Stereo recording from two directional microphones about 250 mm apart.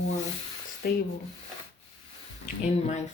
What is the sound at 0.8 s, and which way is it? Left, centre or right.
Speech, left.